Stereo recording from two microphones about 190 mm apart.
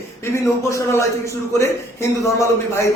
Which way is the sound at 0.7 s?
15° left (ahead or behind).